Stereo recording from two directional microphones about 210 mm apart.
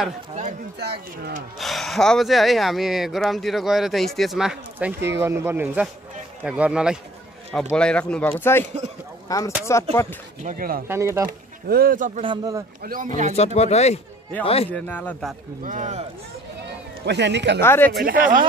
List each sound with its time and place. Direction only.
0.3 s speech: 35° right (ahead or behind)
0.7 s speech: 50° right (ahead or behind)
1.6 s speech: centre (ahead or behind)
10.4 s speech: 40° right (ahead or behind)
10.9 s speech: 15° right (ahead or behind)
11.2 s speech: 45° right (ahead or behind)
12.2 s speech: 20° right (ahead or behind)
12.8 s speech: 40° right (ahead or behind)
13.6 s speech: 30° left (ahead or behind)
14.7 s speech: 10° left (ahead or behind)
15.6 s speech: 35° right (ahead or behind)
16.6 s music: 55° right (ahead or behind)
17.6 s speech: 10° left (ahead or behind)
17.9 s speech: 40° right (ahead or behind)